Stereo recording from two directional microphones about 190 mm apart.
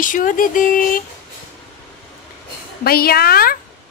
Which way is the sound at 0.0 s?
45° left (ahead or behind).